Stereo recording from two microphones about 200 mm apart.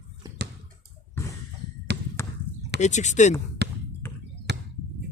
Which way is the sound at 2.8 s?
35° left (ahead or behind).